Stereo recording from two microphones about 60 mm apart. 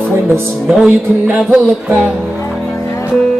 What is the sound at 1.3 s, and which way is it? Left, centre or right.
Music, right.